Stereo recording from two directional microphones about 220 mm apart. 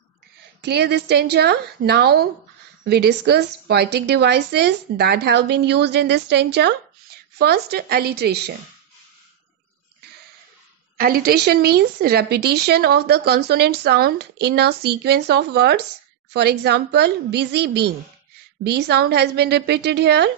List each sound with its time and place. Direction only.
0.6 s a woman's voice: 50° right (ahead or behind)
11.0 s a woman's voice: 40° right (ahead or behind)